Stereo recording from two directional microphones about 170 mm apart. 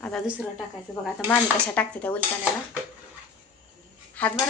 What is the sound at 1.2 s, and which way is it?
Speech, 10° left (ahead or behind).